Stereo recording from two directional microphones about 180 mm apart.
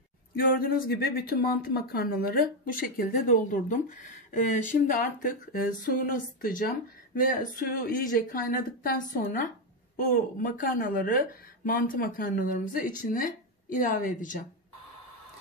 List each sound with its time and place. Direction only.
0.4 s a woman's voice: 55° left (ahead or behind)